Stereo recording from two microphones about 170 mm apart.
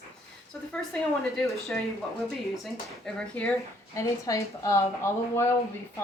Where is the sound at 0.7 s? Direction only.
5° left (ahead or behind).